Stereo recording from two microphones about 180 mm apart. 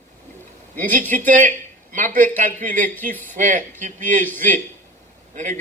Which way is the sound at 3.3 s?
45° right (ahead or behind).